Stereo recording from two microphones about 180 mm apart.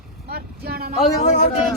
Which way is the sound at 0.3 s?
60° right (ahead or behind).